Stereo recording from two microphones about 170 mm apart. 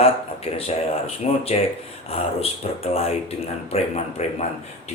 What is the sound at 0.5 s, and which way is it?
Speech, 35° left (ahead or behind).